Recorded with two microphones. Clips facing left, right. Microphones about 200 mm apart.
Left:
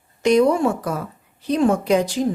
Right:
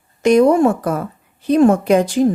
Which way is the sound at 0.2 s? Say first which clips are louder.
Right 4 dB; 50° right (ahead or behind).